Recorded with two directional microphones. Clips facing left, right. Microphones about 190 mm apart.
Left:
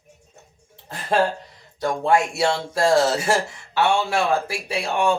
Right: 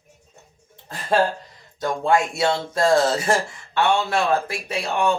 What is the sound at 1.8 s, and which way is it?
Speech, 10° left (ahead or behind).